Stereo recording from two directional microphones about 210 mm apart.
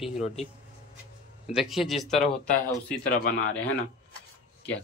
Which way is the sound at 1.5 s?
Centre (ahead or behind).